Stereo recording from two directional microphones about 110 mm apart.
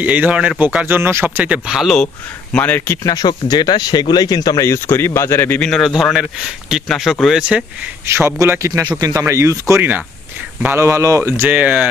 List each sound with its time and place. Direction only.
0.0 s speech: 15° right (ahead or behind)
2.5 s speech: 15° left (ahead or behind)
3.0 s speech: 35° left (ahead or behind)
5.6 s a man's voice: 5° left (ahead or behind); by 7.9 s 10° right (ahead or behind)
8.1 s speech: 20° right (ahead or behind)